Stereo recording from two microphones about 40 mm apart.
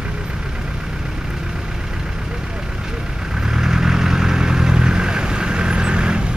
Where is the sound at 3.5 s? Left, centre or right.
Centre.